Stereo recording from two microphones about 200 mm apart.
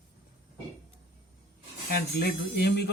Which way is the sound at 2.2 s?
50° left (ahead or behind).